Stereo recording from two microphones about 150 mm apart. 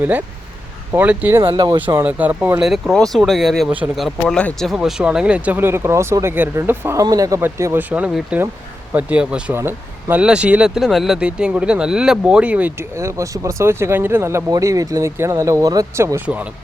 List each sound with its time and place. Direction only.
0.0 s speech: 10° right (ahead or behind)
1.5 s speech: 30° right (ahead or behind)
2.0 s speech: 10° right (ahead or behind)